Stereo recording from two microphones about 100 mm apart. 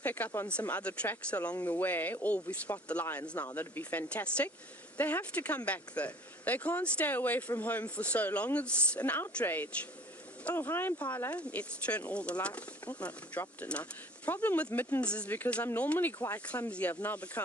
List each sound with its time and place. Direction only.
0.0 s speech: 15° left (ahead or behind)